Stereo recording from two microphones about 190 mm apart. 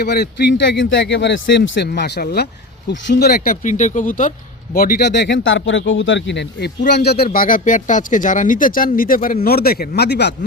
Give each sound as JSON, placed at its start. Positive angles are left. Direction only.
{"t": 0.0, "sound": "speech", "side_deg": 60}
{"t": 7.3, "sound": "speech", "side_deg": 45}